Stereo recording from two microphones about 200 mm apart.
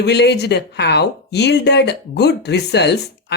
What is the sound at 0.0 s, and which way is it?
Speech, 55° left (ahead or behind).